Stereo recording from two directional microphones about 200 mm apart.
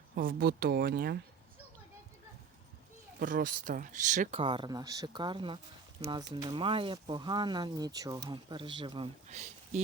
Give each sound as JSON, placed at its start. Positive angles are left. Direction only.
{"t": 0.4, "sound": "speech", "side_deg": -50}
{"t": 3.2, "sound": "speech", "side_deg": -45}